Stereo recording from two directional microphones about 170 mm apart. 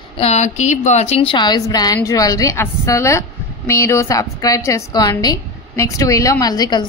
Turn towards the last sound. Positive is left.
turn(degrees=25)  # may be behind; listen again after turning